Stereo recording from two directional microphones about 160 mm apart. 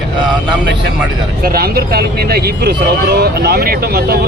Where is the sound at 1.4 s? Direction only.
65° right (ahead or behind).